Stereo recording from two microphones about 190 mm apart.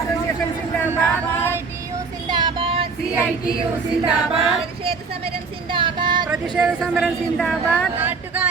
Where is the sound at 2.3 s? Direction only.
25° right (ahead or behind).